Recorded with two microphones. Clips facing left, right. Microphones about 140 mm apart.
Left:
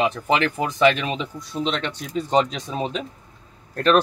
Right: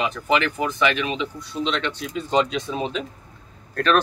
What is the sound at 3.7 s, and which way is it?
Speech, 25° left (ahead or behind).